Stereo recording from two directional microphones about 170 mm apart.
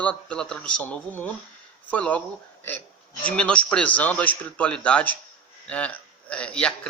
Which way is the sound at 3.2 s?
5° left (ahead or behind).